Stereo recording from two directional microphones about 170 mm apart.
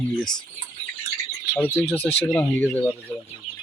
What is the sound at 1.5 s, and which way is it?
Speech, 10° left (ahead or behind).